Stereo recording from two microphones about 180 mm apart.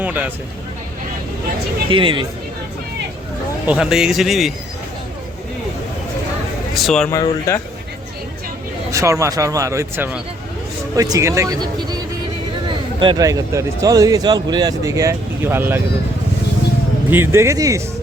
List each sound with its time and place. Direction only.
0.0 s a sound: 10° right (ahead or behind)
1.9 s speech: 30° right (ahead or behind)
3.7 s speech: 5° right (ahead or behind)
6.7 s speech: centre (ahead or behind)
7.1 s speech: 15° left (ahead or behind)
8.9 s speech: 15° right (ahead or behind)
17.1 s speech: 15° right (ahead or behind)